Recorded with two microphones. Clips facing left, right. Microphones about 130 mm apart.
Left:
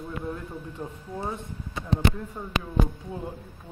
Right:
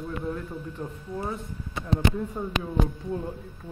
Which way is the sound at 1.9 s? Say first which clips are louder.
Right 1 dB; 10° right (ahead or behind).